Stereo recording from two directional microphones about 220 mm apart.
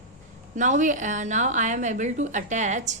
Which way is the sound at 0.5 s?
35° right (ahead or behind).